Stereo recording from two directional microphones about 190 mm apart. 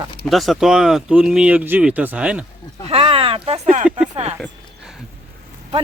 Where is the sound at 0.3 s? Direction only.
Centre (ahead or behind).